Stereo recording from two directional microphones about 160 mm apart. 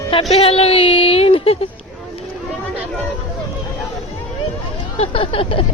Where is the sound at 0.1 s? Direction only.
40° left (ahead or behind).